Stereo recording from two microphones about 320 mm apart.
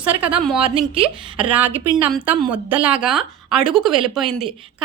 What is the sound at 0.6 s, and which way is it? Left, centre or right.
Speech, centre.